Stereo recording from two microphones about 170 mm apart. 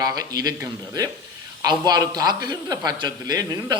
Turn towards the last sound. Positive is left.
turn(degrees=-20)  # may be behind; listen again after turning